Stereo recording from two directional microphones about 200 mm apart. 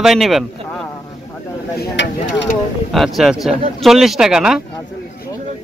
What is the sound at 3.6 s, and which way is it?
Speech, 30° right (ahead or behind).